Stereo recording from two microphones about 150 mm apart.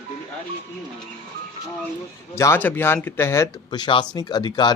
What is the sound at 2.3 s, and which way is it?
Speech, 15° left (ahead or behind).